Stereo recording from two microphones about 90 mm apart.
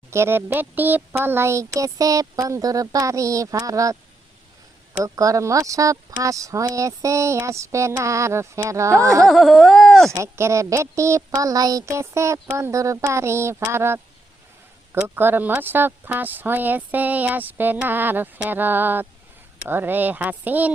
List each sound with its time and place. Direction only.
0.1 s speech: 25° right (ahead or behind)
5.0 s speech: 40° right (ahead or behind)
9.2 s a sound: centre (ahead or behind)
10.3 s speech: 30° right (ahead or behind)
11.9 s speech: 30° right (ahead or behind)
15.0 s speech: 25° right (ahead or behind)